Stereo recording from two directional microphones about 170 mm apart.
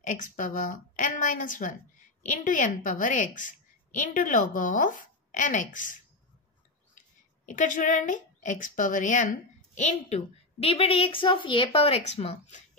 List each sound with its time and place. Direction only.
0.0 s a woman's voice: 50° left (ahead or behind)
7.0 s speech: 50° left (ahead or behind)